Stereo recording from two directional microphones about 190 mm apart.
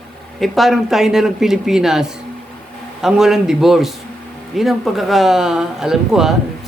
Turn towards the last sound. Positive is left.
turn(degrees=0)  # may be behind; listen again after turning